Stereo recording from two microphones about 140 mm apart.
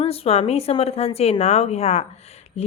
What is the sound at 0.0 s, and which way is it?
A woman's voice, 45° left (ahead or behind).